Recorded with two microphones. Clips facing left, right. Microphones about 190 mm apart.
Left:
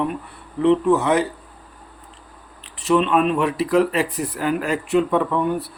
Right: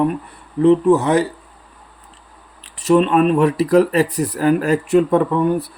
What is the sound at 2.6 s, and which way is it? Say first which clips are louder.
A man's voice: right 4 dB; 40° right (ahead or behind).